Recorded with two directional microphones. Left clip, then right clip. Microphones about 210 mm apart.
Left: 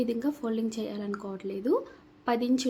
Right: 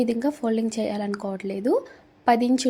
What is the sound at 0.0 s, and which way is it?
Speech, 25° right (ahead or behind).